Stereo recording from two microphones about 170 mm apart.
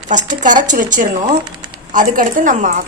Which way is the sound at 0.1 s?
45° right (ahead or behind).